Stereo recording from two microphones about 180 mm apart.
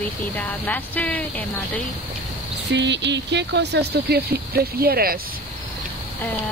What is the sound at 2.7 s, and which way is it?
Speech, 75° right (ahead or behind).